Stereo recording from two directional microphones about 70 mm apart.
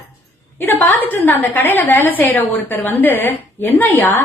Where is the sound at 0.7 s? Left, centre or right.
Left.